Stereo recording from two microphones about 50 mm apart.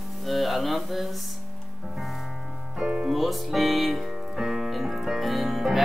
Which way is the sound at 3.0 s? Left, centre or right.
Centre.